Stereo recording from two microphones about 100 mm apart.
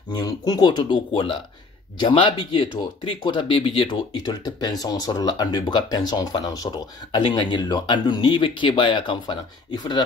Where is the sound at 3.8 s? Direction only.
45° left (ahead or behind).